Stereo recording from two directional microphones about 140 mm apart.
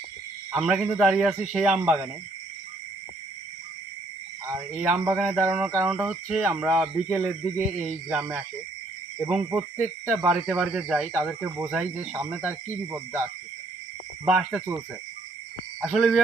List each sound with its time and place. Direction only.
0.5 s a man's voice: 5° right (ahead or behind)
4.5 s speech: 10° right (ahead or behind)
7.1 s speech: 20° right (ahead or behind)
9.1 s speech: 10° right (ahead or behind)
14.3 s a man's voice: 5° right (ahead or behind)
15.8 s a man's voice: centre (ahead or behind)